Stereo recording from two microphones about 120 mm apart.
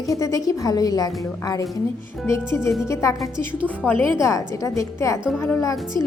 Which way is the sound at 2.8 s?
25° left (ahead or behind).